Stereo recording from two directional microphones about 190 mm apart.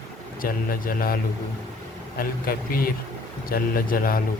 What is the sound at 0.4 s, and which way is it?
Speech, 50° left (ahead or behind).